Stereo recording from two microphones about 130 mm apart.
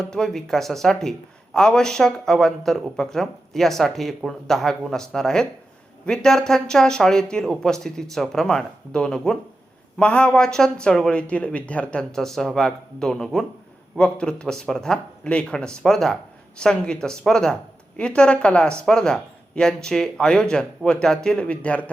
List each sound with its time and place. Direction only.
0.0 s speech: 5° left (ahead or behind)